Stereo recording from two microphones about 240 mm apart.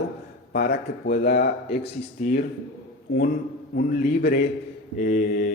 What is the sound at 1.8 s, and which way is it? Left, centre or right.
Mantra, left.